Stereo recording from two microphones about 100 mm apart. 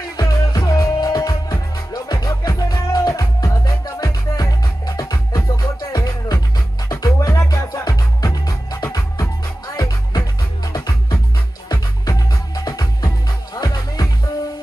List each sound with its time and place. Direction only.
0.0 s music: 40° left (ahead or behind)